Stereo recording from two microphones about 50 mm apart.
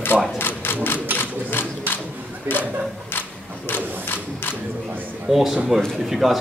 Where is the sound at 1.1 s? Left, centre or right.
Right.